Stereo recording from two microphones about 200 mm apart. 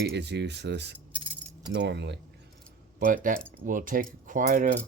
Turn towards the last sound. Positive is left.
turn(degrees=-40)  # may be behind; listen again after turning